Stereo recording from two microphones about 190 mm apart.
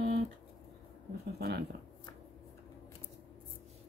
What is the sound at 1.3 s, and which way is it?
Speech, 55° right (ahead or behind).